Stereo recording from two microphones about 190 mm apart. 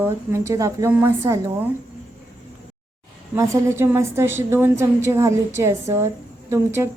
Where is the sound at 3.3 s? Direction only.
15° right (ahead or behind).